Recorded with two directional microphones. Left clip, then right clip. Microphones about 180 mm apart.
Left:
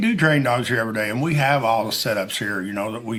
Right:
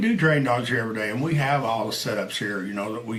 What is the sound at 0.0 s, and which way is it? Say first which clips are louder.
A man's voice: left 3 dB; 35° left (ahead or behind).